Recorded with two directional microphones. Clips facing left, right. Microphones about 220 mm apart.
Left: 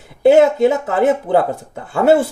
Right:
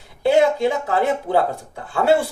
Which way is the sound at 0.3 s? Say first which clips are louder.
Left 6 dB; 50° left (ahead or behind).